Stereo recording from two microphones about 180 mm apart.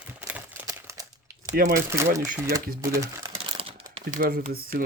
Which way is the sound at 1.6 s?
55° right (ahead or behind).